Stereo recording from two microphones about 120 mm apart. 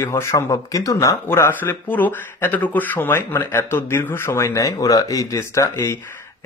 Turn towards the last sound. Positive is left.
turn(degrees=25)  # may be behind; listen again after turning